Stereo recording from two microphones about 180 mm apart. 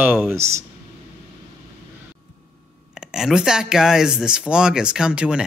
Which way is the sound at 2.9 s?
5° right (ahead or behind).